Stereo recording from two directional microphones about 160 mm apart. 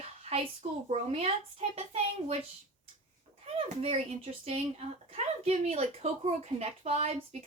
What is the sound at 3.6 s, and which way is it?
Speech, 40° right (ahead or behind).